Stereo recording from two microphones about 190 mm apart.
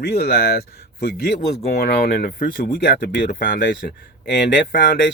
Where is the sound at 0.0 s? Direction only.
55° left (ahead or behind).